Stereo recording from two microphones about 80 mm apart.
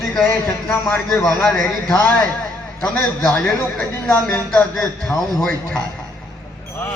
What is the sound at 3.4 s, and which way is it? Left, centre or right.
A man's voice, centre.